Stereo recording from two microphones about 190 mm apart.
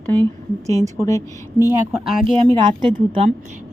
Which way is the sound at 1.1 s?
15° left (ahead or behind).